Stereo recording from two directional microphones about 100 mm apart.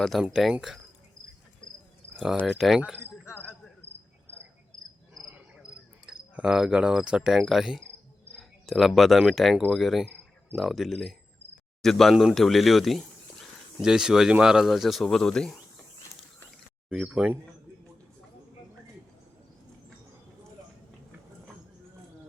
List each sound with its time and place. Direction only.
0.0 s speech: centre (ahead or behind)
2.6 s speech: 5° right (ahead or behind)
3.8 s cricket: 20° left (ahead or behind)
6.1 s cricket: 5° right (ahead or behind)
8.6 s speech: centre (ahead or behind)
16.9 s speech: 10° right (ahead or behind)